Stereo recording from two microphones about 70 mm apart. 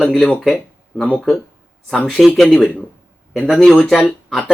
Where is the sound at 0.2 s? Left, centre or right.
Centre.